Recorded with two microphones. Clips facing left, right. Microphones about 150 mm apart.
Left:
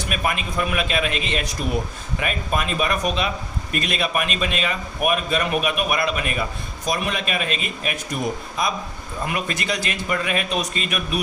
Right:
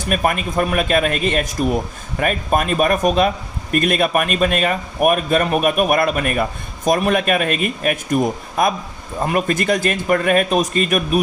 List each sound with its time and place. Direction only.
0.1 s speech: 45° right (ahead or behind)